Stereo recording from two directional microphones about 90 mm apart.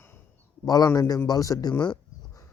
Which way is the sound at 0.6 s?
45° left (ahead or behind).